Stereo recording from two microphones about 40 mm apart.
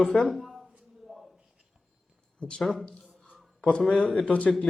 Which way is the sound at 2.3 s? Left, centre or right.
Left.